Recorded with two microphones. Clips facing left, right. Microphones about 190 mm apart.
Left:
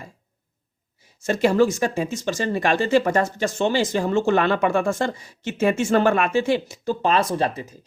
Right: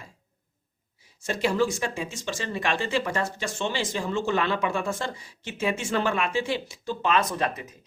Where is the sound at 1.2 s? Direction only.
45° left (ahead or behind).